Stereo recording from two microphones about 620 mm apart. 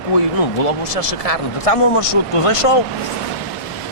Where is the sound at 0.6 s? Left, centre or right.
Left.